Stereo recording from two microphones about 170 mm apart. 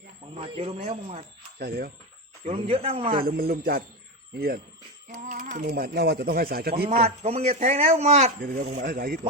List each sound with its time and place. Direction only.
0.3 s speech: 35° right (ahead or behind)
1.5 s speech: 65° right (ahead or behind)
2.4 s speech: 35° right (ahead or behind)
3.2 s speech: 60° right (ahead or behind)
5.1 s a sound: 45° right (ahead or behind)
5.6 s speech: 65° right (ahead or behind)
7.0 s speech: 40° right (ahead or behind)
8.4 s speech: 55° right (ahead or behind)
8.9 s speech: 55° right (ahead or behind)